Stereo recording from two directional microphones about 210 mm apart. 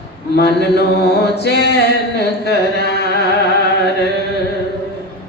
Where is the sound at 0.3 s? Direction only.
50° left (ahead or behind).